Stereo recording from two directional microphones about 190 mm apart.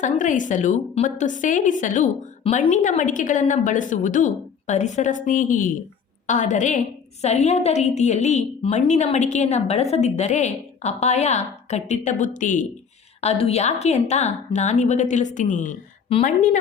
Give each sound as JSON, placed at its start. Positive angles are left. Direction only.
{"t": 0.0, "sound": "a woman's voice", "side_deg": 40}
{"t": 13.2, "sound": "a woman's voice", "side_deg": 30}